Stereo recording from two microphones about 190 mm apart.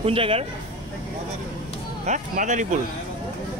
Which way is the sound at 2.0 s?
40° right (ahead or behind).